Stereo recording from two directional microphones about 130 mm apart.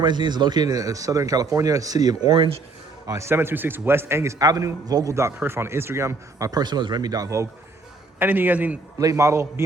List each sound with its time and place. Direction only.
0.0 s a man's voice: 35° right (ahead or behind)
3.1 s a man's voice: 20° right (ahead or behind)
8.2 s a man's voice: 15° right (ahead or behind)
9.0 s a man's voice: 25° right (ahead or behind)